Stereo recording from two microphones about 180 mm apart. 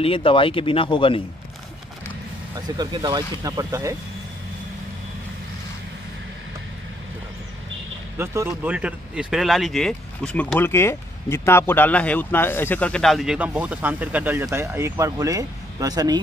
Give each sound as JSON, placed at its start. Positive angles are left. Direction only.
{"t": 0.0, "sound": "speech", "side_deg": 30}
{"t": 2.8, "sound": "speech", "side_deg": -25}
{"t": 8.2, "sound": "speech", "side_deg": -15}